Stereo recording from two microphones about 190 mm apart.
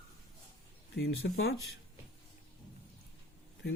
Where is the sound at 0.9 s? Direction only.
90° left.